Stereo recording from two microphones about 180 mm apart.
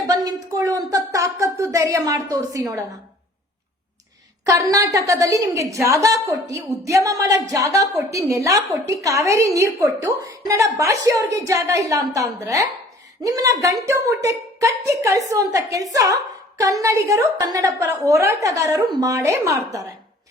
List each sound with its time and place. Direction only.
0.5 s speech: 20° right (ahead or behind)
4.4 s a woman's voice: 20° right (ahead or behind)